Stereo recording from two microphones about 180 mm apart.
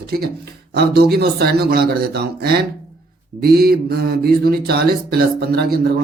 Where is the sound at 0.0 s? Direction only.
60° right (ahead or behind).